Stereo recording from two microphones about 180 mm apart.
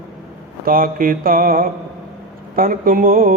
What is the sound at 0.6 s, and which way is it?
Mantra, 50° right (ahead or behind).